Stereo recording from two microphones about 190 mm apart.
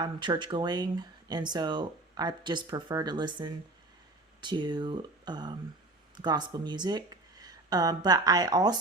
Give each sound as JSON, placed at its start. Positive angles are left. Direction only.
{"t": 0.0, "sound": "speech", "side_deg": -25}